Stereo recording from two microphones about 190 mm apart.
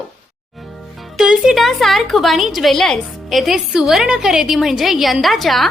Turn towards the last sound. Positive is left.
turn(degrees=0)  # may be behind; listen again after turning